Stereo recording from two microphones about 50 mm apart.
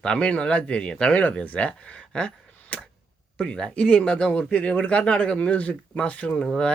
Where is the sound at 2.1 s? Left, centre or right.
Left.